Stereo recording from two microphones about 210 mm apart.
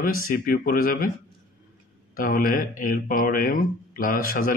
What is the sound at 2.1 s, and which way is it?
Speech, 40° left (ahead or behind).